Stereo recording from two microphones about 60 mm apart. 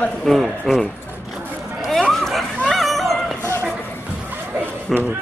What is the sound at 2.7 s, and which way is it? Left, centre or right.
Dog, centre.